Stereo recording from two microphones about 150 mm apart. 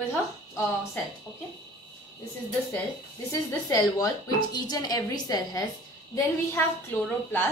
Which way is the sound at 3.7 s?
25° left (ahead or behind).